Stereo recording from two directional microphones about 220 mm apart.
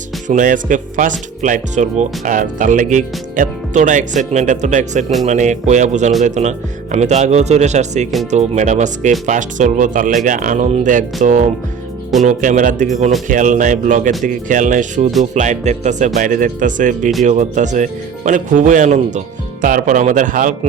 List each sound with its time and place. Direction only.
0.3 s speech: 35° right (ahead or behind)